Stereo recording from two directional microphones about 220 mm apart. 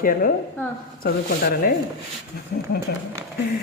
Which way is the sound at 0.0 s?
40° left (ahead or behind).